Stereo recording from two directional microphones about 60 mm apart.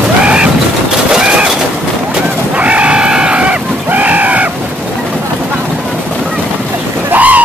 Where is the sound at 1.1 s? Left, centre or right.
Centre.